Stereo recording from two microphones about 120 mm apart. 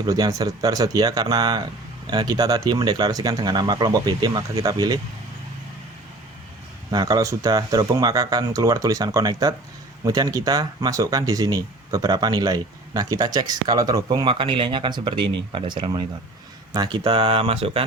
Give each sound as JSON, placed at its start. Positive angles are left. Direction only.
{"t": 0.0, "sound": "speech", "side_deg": -30}
{"t": 6.9, "sound": "speech", "side_deg": -35}
{"t": 14.1, "sound": "speech", "side_deg": -40}
{"t": 17.1, "sound": "speech", "side_deg": -50}